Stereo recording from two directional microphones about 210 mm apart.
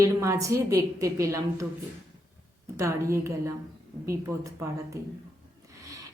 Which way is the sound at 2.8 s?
15° right (ahead or behind).